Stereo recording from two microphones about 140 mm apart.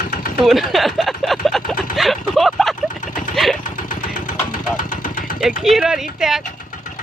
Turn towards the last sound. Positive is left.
turn(degrees=-5)  # may be behind; listen again after turning